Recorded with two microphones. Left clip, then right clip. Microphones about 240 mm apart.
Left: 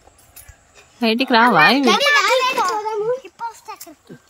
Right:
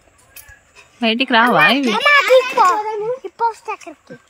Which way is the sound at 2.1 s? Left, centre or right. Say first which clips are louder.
Right 4 dB; right.